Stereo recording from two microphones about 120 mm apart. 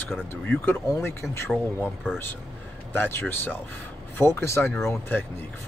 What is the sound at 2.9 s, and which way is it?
Speech, 15° left (ahead or behind).